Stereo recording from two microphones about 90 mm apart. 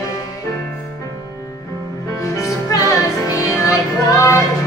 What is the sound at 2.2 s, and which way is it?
Music, 40° left (ahead or behind).